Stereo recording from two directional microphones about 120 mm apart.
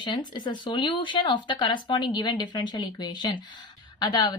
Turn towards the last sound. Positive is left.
turn(degrees=35)  # may be behind; listen again after turning